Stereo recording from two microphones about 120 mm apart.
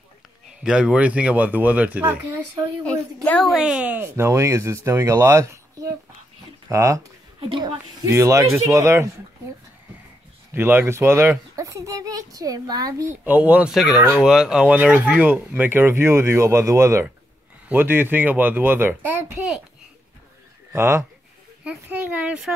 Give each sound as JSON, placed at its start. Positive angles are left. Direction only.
{"t": 0.7, "sound": "speech", "side_deg": -5}
{"t": 2.8, "sound": "a woman's voice", "side_deg": 10}
{"t": 3.4, "sound": "a child's voice", "side_deg": -5}
{"t": 7.3, "sound": "speech", "side_deg": -45}
{"t": 8.0, "sound": "a child's voice", "side_deg": -25}
{"t": 10.5, "sound": "a child's voice", "side_deg": -20}
{"t": 13.1, "sound": "a child's voice", "side_deg": -15}
{"t": 20.7, "sound": "a child's voice", "side_deg": -20}